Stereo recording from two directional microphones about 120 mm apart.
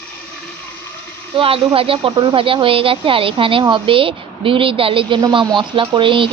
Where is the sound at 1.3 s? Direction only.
50° right (ahead or behind).